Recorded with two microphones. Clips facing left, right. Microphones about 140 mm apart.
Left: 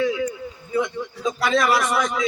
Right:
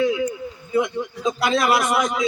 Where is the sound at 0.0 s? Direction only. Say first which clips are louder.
Right 2 dB; 20° right (ahead or behind).